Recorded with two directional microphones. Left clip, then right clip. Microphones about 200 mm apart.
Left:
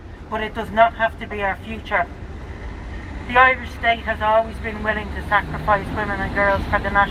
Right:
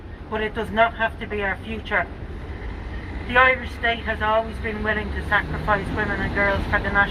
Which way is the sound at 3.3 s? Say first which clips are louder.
Left 2 dB; 15° left (ahead or behind).